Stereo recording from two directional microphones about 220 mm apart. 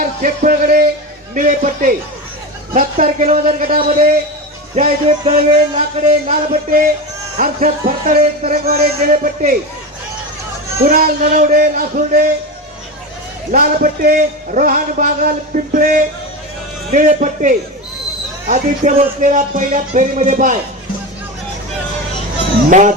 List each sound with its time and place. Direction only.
0.0 s a man's voice: 40° right (ahead or behind)
4.7 s a man's voice: 30° right (ahead or behind)
8.8 s a man's voice: 30° right (ahead or behind)
10.8 s a man's voice: 40° right (ahead or behind)
13.5 s a man's voice: 40° right (ahead or behind)